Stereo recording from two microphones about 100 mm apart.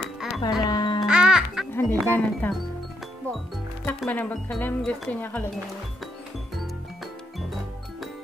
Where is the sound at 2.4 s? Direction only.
15° left (ahead or behind).